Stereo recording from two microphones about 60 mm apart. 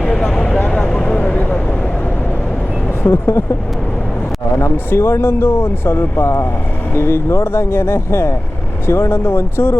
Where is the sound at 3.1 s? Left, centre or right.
Left.